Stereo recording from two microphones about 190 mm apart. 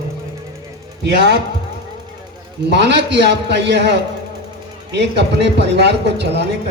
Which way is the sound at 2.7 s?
60° right (ahead or behind).